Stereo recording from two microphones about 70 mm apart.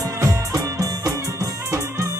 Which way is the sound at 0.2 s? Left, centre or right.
Right.